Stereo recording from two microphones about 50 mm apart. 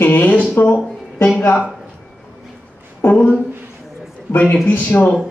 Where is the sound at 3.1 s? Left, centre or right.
Left.